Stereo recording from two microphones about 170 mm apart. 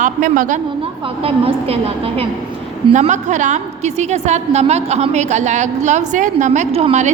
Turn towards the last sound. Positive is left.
turn(degrees=-40)  # may be behind; listen again after turning